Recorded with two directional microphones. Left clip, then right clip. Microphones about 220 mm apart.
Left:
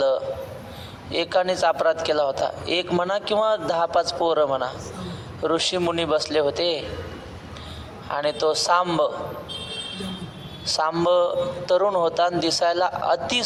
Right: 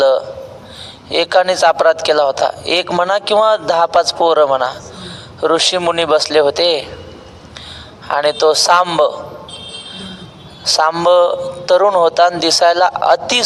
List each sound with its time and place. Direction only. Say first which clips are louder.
1.1 s speech: right 9 dB; 40° right (ahead or behind)
8.0 s speech: right 10 dB; 40° right (ahead or behind)
10.7 s speech: right 9 dB; 40° right (ahead or behind)